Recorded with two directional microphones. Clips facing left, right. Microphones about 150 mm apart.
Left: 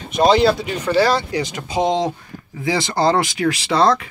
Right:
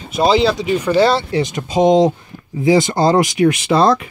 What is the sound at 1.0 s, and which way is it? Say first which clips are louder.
Speech: right 2 dB; 25° right (ahead or behind).